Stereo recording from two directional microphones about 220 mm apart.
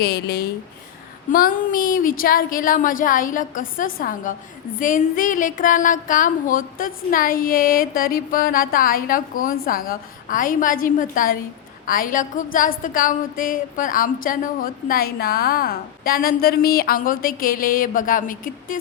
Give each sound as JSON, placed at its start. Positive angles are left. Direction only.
{"t": 0.0, "sound": "a woman's voice", "side_deg": 45}